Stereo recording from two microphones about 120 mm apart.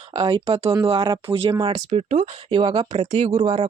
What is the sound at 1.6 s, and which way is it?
Speech, 60° right (ahead or behind).